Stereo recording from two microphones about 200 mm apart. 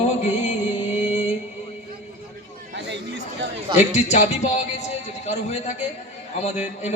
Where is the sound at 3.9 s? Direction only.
35° left (ahead or behind).